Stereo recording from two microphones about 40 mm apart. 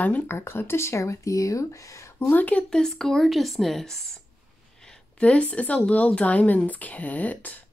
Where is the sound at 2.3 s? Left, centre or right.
Left.